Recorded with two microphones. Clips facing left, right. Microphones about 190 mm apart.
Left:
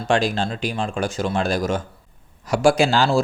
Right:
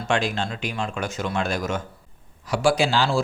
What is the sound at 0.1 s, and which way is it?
Speech, 35° left (ahead or behind).